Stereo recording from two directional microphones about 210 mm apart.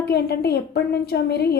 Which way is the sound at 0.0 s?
50° left (ahead or behind).